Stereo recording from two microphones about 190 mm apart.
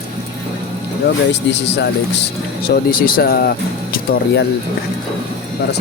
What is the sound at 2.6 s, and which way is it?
Speech, 50° left (ahead or behind).